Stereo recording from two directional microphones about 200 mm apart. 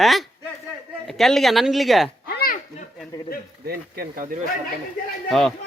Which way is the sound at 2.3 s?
50° left (ahead or behind).